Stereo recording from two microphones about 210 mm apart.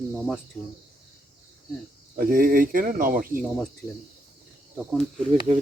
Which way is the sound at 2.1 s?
45° right (ahead or behind).